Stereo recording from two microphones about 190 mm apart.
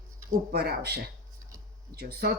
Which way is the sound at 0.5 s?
55° right (ahead or behind).